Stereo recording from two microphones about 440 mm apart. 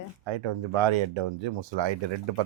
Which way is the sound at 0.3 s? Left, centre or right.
Right.